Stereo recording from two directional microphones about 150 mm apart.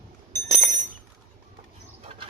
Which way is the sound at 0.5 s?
55° right (ahead or behind).